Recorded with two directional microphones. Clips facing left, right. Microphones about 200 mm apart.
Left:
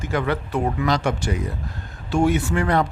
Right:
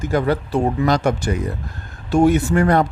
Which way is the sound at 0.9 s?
45° right (ahead or behind).